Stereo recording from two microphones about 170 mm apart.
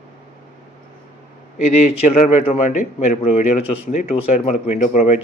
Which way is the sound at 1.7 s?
45° left (ahead or behind).